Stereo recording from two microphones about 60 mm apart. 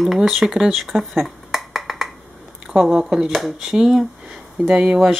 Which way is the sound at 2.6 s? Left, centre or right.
Centre.